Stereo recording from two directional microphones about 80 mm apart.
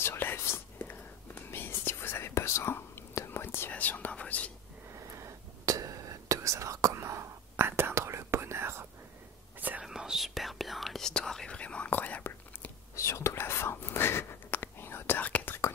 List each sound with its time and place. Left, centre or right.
0.0 s whispering: left
5.1 s whispering: right
9.6 s whispering: right
9.8 s whispering: centre; by 12.7 s left
12.9 s whispering: left